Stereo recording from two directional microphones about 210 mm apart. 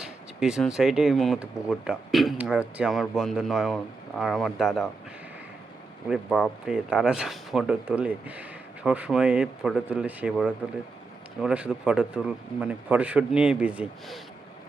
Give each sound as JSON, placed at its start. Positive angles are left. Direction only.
{"t": 0.0, "sound": "speech", "side_deg": -5}
{"t": 6.1, "sound": "speech", "side_deg": -5}